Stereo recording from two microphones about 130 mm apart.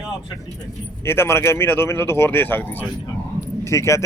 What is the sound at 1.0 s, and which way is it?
Speech, 20° left (ahead or behind).